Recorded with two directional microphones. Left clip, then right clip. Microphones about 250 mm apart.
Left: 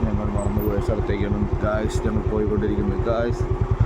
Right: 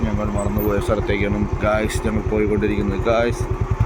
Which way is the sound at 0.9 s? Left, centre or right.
Centre.